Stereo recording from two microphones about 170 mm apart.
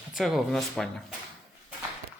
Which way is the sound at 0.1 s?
Centre (ahead or behind).